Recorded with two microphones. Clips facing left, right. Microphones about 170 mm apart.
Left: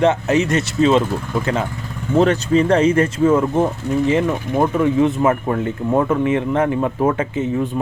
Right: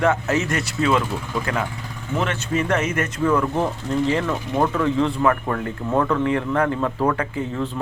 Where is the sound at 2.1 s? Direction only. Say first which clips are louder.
Left 9 dB; 35° left (ahead or behind).